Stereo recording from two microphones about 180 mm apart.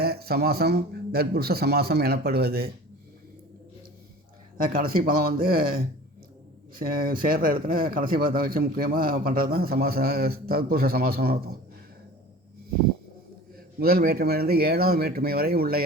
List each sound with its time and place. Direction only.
0.0 s a man's voice: 60° right (ahead or behind)
4.5 s speech: 50° right (ahead or behind)
13.7 s a man's voice: 55° right (ahead or behind)